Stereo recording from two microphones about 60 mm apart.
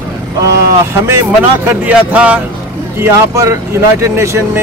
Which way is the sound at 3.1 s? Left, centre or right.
Right.